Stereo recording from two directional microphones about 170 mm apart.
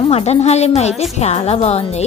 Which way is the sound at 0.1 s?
35° left (ahead or behind).